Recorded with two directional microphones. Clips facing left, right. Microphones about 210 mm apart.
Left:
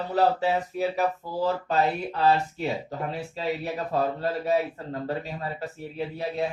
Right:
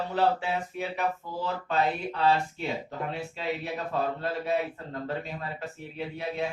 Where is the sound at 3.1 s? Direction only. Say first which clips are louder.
Left 3 dB; 35° left (ahead or behind).